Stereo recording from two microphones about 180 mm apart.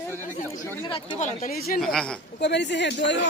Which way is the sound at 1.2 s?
45° left (ahead or behind).